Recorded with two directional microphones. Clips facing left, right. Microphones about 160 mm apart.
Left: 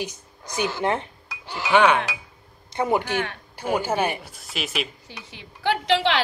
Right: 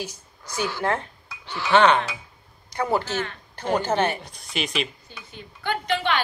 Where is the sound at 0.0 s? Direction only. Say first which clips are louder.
Left 3 dB; 20° left (ahead or behind); by 4.8 s centre (ahead or behind).